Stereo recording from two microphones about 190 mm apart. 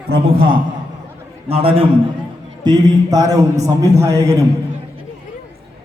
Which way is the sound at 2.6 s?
20° right (ahead or behind).